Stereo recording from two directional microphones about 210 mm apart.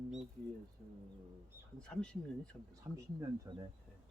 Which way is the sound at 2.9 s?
15° right (ahead or behind).